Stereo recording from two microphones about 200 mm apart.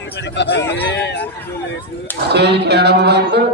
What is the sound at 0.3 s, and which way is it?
Speech, 60° left (ahead or behind).